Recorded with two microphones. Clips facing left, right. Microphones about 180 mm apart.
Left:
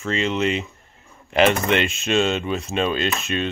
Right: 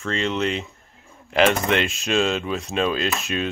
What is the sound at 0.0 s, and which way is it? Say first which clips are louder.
Speech: left 2 dB; 5° left (ahead or behind).